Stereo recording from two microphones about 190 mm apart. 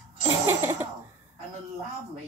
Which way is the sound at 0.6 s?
10° right (ahead or behind).